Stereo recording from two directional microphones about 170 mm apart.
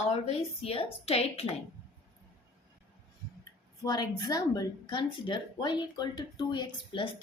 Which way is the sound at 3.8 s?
25° left (ahead or behind).